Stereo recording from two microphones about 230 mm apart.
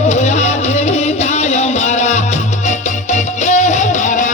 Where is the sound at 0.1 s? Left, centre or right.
Left.